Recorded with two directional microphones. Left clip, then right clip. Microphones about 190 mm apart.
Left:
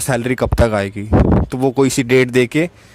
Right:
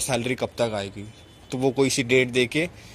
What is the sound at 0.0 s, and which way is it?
A man's voice, 50° left (ahead or behind).